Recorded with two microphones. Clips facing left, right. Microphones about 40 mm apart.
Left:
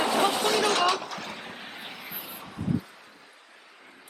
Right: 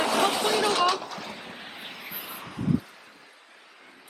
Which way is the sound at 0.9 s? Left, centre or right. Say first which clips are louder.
Left 1 dB; left.